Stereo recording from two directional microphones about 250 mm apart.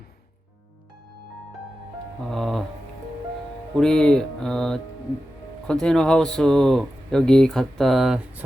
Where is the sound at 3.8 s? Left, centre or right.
Centre.